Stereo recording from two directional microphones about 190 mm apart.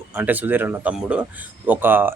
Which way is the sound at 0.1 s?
10° right (ahead or behind).